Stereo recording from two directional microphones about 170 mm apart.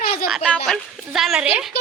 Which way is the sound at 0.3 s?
Centre (ahead or behind).